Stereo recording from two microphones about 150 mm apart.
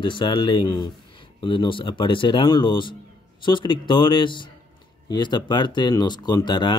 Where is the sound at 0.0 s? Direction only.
35° left (ahead or behind).